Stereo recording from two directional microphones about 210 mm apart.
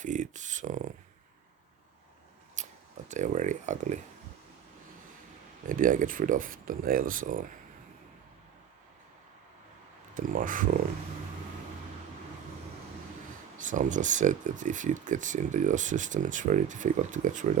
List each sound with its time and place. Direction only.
0.0 s speech: 35° right (ahead or behind)
2.6 s a sound: 35° right (ahead or behind)
3.1 s speech: 35° right (ahead or behind)
5.6 s speech: 40° right (ahead or behind)
10.2 s speech: 40° right (ahead or behind)
13.6 s speech: 35° right (ahead or behind)